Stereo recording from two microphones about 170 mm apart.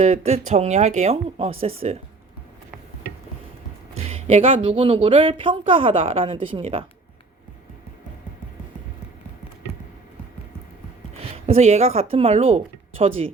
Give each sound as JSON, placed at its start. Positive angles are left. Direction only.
{"t": 0.0, "sound": "speech", "side_deg": -40}
{"t": 4.1, "sound": "speech", "side_deg": -35}
{"t": 11.4, "sound": "speech", "side_deg": -40}